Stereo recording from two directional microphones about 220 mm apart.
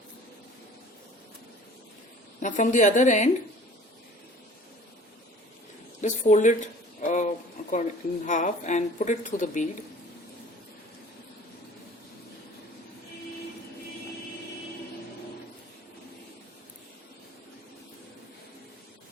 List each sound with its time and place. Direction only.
2.4 s speech: 35° left (ahead or behind)
6.0 s speech: 35° left (ahead or behind)